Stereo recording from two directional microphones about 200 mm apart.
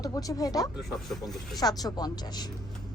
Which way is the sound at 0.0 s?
20° left (ahead or behind).